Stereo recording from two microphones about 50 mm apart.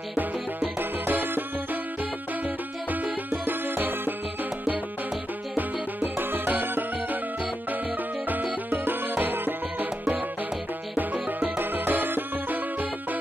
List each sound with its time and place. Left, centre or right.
0.6 s music: right
2.9 s music: right
5.6 s music: right
8.3 s music: right
11.5 s music: right